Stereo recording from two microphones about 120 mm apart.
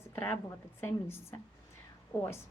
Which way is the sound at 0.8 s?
20° left (ahead or behind).